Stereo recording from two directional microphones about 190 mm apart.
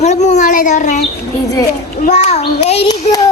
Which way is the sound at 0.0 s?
35° left (ahead or behind).